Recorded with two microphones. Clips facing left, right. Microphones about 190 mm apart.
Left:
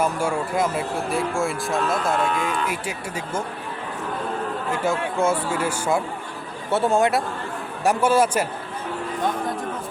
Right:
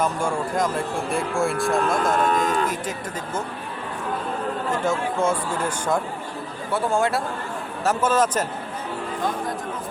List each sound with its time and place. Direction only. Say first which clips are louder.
0.0 s speech: left 1 dB; 5° left (ahead or behind)
2.2 s speech: right 3 dB; 40° right (ahead or behind)
4.7 s speech: even; 10° left (ahead or behind)
6.7 s speech: left 3 dB; 25° left (ahead or behind)